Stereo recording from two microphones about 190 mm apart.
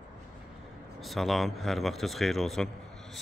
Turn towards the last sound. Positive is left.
turn(degrees=0)  # may be behind; listen again after turning